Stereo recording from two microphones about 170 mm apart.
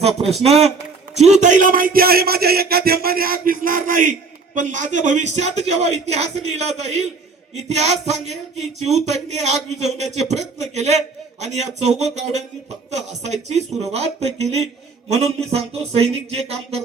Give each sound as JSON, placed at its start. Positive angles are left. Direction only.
{"t": 0.0, "sound": "a man's voice", "side_deg": -35}